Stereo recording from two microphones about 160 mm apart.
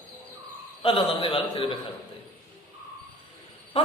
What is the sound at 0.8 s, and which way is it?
Speech, 30° left (ahead or behind).